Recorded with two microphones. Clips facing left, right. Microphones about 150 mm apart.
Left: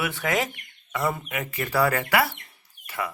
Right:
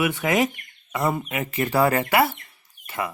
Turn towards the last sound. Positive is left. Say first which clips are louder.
# right 2 dB
turn(degrees=-20)  # may be behind; listen again after turning